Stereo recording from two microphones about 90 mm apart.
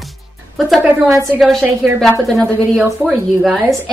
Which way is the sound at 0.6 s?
Centre (ahead or behind).